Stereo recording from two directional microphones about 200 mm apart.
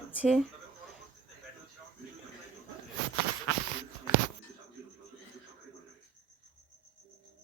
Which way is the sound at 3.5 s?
70° left (ahead or behind).